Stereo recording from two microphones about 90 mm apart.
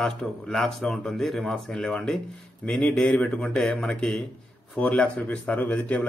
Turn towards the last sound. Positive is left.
turn(degrees=15)  # may be behind; listen again after turning